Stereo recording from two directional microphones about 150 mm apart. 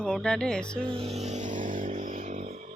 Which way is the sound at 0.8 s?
40° right (ahead or behind).